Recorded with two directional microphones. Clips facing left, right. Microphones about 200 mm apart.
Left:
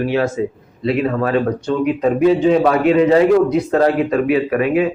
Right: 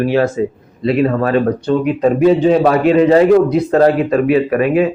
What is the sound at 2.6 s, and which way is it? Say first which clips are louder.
A man's voice: right 2 dB; 40° right (ahead or behind).